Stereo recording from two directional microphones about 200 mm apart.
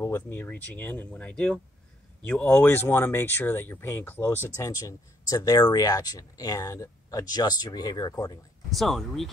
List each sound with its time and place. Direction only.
0.0 s speech: 10° left (ahead or behind)
8.6 s speech: centre (ahead or behind)